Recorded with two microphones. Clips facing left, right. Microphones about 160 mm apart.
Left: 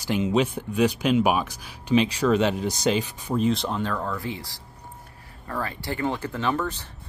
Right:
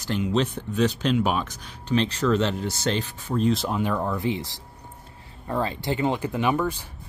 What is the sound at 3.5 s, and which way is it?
Speech, 5° right (ahead or behind).